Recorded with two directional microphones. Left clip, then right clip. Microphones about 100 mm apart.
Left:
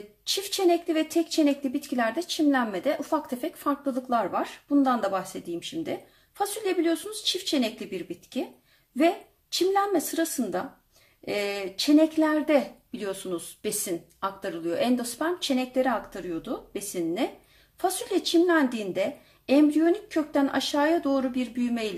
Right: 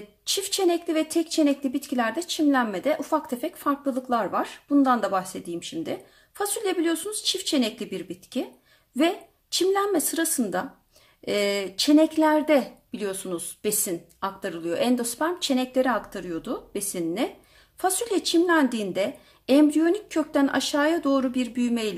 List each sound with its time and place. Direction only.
0.3 s speech: 45° right (ahead or behind)
6.3 s a woman's voice: 55° right (ahead or behind)